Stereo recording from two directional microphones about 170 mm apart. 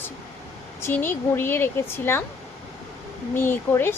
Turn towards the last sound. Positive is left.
turn(degrees=15)  # may be behind; listen again after turning